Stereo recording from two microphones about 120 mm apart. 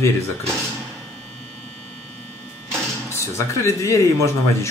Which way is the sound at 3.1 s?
25° left (ahead or behind).